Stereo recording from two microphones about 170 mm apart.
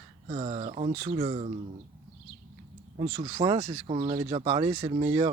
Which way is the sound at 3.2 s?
30° right (ahead or behind).